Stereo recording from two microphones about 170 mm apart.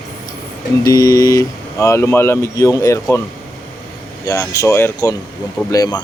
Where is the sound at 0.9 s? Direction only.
20° left (ahead or behind).